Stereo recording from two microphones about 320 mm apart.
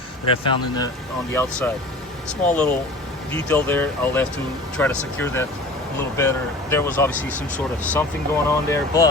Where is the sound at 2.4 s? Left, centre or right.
Centre.